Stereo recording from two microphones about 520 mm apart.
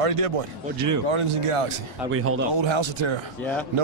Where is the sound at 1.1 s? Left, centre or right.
Right.